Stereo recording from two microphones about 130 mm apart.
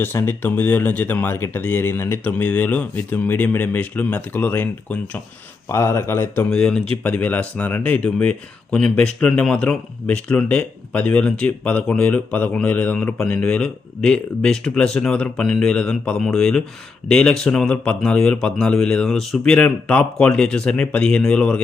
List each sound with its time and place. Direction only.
0.0 s speech: 15° left (ahead or behind)
6.5 s speech: 5° left (ahead or behind)